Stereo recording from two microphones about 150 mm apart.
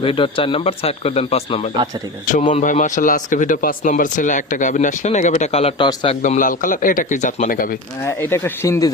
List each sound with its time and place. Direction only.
0.0 s speech: 35° left (ahead or behind)
2.2 s speech: 55° left (ahead or behind); by 6.1 s 35° left (ahead or behind)
6.2 s speech: 60° left (ahead or behind)
8.0 s speech: 20° left (ahead or behind)